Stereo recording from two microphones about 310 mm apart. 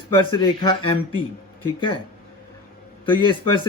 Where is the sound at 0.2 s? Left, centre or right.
Centre.